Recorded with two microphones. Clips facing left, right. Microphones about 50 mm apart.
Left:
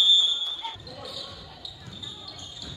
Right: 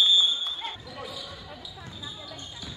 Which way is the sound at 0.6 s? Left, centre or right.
Right.